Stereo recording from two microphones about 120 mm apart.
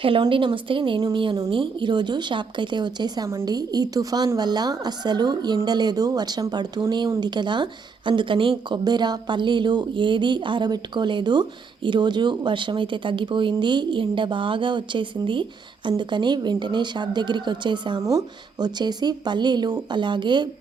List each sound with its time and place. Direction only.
0.0 s a woman's voice: 45° right (ahead or behind)